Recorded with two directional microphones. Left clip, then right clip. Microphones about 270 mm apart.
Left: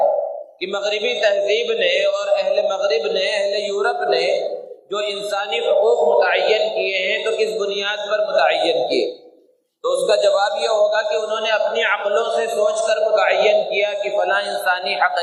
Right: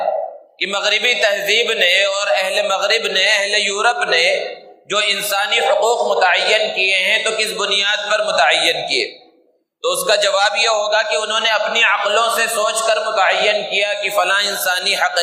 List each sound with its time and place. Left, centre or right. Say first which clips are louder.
0.9 s a man's voice: right 3 dB; right